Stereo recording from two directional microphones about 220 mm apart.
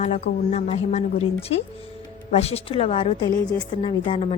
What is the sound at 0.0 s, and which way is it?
A woman's voice, 30° left (ahead or behind).